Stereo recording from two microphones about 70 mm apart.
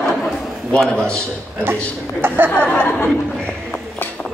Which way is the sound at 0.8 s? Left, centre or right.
Centre.